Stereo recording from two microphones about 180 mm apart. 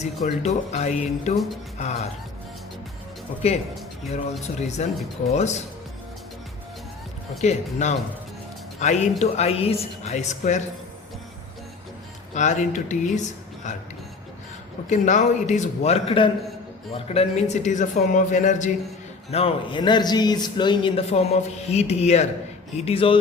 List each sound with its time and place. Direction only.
0.0 s speech: 40° left (ahead or behind)
3.4 s speech: 35° left (ahead or behind)
7.4 s speech: 40° left (ahead or behind)
12.3 s speech: 40° left (ahead or behind)
14.8 s speech: 40° left (ahead or behind)
19.3 s speech: 30° left (ahead or behind)